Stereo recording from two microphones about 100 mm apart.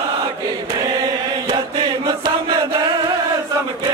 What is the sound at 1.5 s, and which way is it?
Chant, 50° right (ahead or behind).